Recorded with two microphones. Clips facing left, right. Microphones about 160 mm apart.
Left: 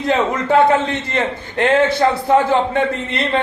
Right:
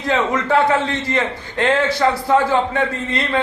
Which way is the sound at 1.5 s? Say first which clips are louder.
Left 3 dB; 20° left (ahead or behind).